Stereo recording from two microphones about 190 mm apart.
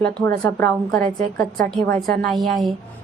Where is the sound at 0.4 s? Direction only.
5° left (ahead or behind).